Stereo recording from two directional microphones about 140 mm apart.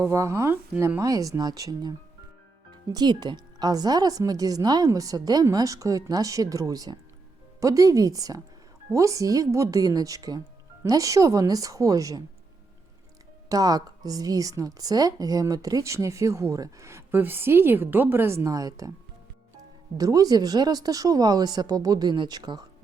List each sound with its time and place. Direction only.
0.0 s speech: 20° right (ahead or behind)
13.5 s speech: 25° right (ahead or behind)
20.0 s speech: 25° right (ahead or behind)